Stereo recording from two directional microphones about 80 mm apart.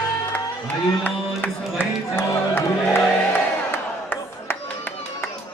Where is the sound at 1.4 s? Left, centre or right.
Left.